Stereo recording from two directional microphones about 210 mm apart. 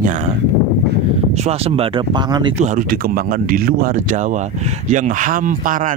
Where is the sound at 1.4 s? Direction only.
30° right (ahead or behind).